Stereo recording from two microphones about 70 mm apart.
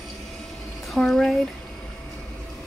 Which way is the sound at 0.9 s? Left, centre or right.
Centre.